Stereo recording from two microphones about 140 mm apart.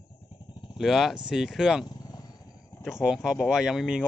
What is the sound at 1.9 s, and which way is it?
Vehicle, 30° left (ahead or behind).